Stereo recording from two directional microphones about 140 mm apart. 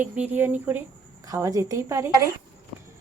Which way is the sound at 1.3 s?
25° right (ahead or behind).